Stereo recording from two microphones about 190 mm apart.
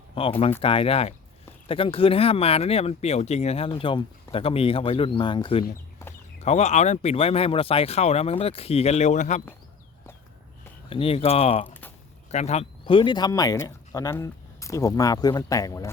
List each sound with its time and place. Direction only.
0.1 s speech: 30° left (ahead or behind)
10.8 s speech: 30° left (ahead or behind)